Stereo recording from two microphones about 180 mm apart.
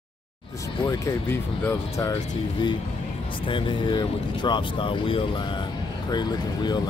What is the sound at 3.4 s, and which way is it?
Speech, 25° left (ahead or behind).